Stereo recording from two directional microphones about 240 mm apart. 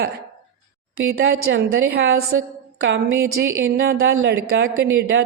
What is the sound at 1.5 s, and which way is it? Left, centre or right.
Speech, right.